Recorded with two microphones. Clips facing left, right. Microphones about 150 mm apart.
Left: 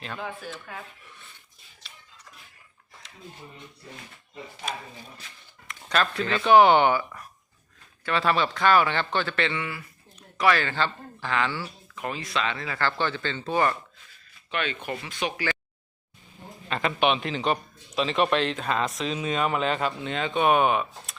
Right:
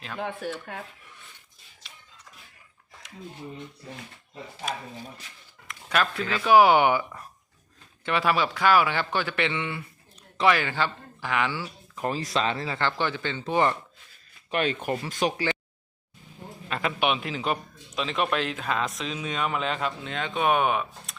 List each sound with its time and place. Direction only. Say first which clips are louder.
0.2 s speech: right 8 dB; 65° right (ahead or behind)
5.6 s a man's voice: even; 5° right (ahead or behind)
11.9 s speech: right 3 dB; 35° right (ahead or behind); by 13.7 s 20° right (ahead or behind)
14.5 s speech: right 4 dB; 40° right (ahead or behind)
16.6 s a man's voice: left 2 dB; 5° right (ahead or behind)